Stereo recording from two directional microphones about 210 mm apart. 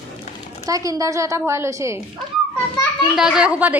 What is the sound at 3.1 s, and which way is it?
Speech, 5° right (ahead or behind).